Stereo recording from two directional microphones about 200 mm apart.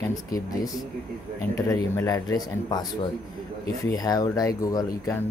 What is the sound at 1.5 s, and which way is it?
Speech, 15° left (ahead or behind).